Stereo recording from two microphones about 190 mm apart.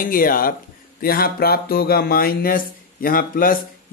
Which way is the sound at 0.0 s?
50° left (ahead or behind).